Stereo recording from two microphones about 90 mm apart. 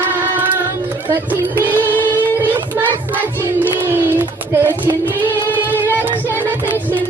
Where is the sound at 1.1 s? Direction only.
20° right (ahead or behind).